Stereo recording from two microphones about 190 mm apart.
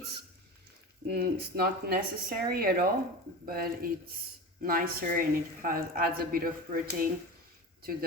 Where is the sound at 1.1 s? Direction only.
55° right (ahead or behind).